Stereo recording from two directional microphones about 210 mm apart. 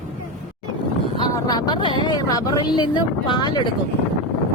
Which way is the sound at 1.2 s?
15° left (ahead or behind).